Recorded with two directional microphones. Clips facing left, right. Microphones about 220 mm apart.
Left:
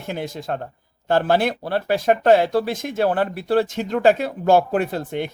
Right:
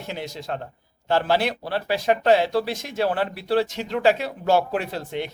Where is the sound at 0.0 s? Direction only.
50° left (ahead or behind).